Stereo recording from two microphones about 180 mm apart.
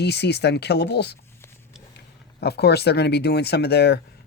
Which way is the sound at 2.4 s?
65° left (ahead or behind).